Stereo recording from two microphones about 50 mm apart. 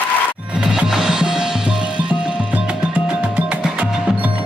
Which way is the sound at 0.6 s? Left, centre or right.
Centre.